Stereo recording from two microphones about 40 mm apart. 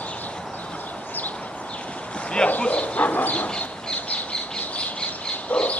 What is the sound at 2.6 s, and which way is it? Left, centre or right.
Bow-wow, left.